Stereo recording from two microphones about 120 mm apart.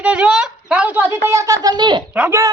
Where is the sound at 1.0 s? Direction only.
25° right (ahead or behind).